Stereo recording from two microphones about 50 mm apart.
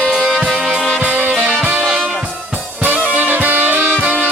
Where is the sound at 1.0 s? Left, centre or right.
Right.